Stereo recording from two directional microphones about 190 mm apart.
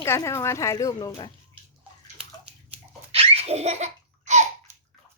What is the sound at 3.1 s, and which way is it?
Laughter, 30° right (ahead or behind).